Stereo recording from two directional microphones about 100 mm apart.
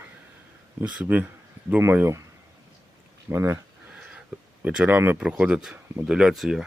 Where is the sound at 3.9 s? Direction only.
10° right (ahead or behind).